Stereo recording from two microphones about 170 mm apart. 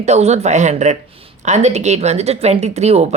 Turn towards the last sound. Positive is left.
turn(degrees=-40)  # may be behind; listen again after turning